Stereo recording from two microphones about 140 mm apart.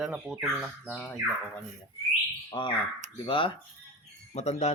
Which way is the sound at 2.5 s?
35° left (ahead or behind).